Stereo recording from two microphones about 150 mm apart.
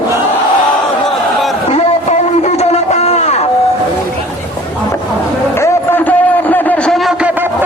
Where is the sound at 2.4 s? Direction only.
50° left (ahead or behind).